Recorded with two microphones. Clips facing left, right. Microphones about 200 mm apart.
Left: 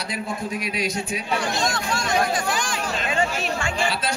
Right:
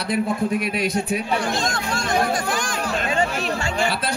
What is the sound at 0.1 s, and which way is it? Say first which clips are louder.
A man's voice: right 9 dB; 55° right (ahead or behind).